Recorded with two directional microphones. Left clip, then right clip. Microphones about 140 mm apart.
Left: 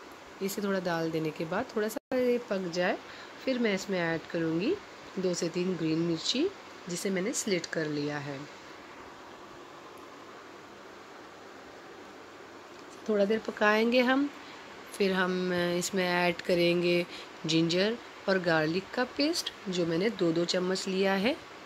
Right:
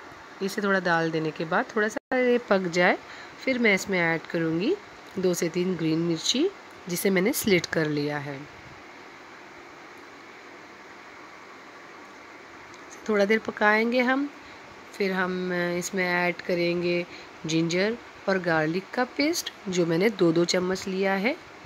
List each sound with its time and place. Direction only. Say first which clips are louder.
0.4 s speech: right 7 dB; 10° right (ahead or behind)
2.4 s speech: right 8 dB; 30° right (ahead or behind)
13.0 s speech: right 5 dB; 10° right (ahead or behind); by 20.6 s 30° right (ahead or behind)
20.6 s speech: right 2 dB; 10° right (ahead or behind)